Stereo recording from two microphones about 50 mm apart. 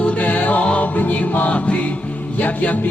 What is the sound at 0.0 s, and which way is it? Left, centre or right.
Music, left.